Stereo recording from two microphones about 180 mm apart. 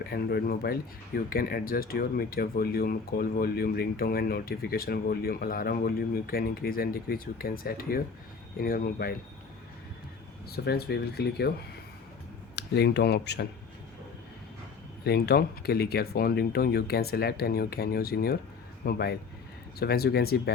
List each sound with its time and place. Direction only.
0.0 s speech: 60° left (ahead or behind)
10.5 s speech: 60° left (ahead or behind)
12.5 s speech: 65° left (ahead or behind)
15.0 s speech: 65° left (ahead or behind)